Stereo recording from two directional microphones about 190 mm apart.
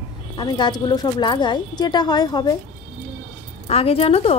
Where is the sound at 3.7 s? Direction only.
30° left (ahead or behind).